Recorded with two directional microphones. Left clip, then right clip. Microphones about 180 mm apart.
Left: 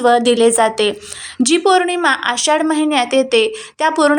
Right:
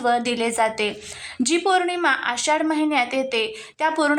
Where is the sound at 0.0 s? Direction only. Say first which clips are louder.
Left 10 dB; 25° left (ahead or behind).